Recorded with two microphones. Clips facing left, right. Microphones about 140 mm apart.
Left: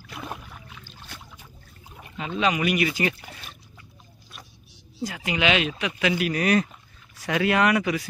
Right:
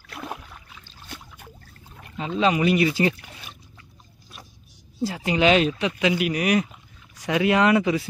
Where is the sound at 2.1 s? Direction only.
25° right (ahead or behind).